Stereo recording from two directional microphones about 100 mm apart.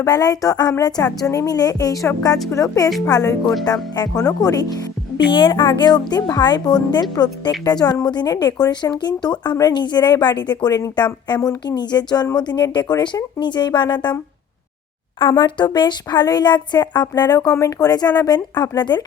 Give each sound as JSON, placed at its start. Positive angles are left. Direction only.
{"t": 0.0, "sound": "a sound", "side_deg": 40}
{"t": 5.3, "sound": "a woman's voice", "side_deg": 55}
{"t": 15.2, "sound": "a woman's voice", "side_deg": 50}